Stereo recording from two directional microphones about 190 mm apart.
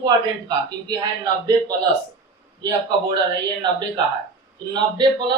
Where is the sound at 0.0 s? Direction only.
20° right (ahead or behind).